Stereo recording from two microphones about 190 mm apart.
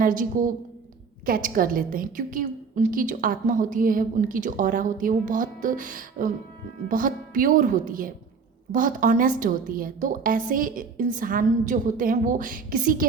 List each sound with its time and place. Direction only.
0.0 s a woman's voice: 45° right (ahead or behind)